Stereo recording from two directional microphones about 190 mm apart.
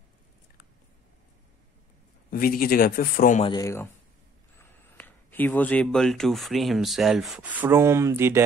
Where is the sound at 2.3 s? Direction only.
50° left (ahead or behind).